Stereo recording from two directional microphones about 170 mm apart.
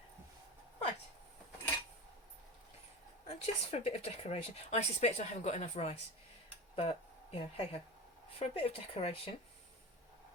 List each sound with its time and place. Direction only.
3.2 s speech: 35° left (ahead or behind)